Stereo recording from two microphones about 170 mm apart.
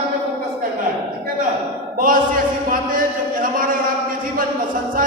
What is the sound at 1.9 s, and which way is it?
Speech, 55° right (ahead or behind).